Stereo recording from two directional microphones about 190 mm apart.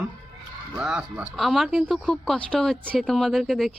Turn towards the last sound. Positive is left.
turn(degrees=0)  # may be behind; listen again after turning